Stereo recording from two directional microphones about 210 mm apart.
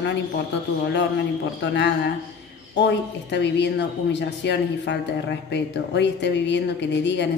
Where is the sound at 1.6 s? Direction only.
55° left (ahead or behind).